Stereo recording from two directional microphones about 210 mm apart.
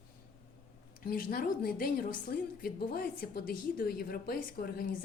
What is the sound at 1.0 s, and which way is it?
A woman's voice, 40° left (ahead or behind).